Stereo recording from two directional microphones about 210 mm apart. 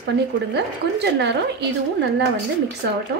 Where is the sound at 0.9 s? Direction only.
55° right (ahead or behind).